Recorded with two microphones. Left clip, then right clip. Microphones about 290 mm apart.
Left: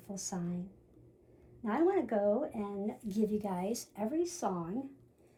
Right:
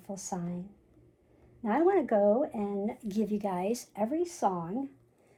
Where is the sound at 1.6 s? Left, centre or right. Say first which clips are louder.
Right 5 dB; right.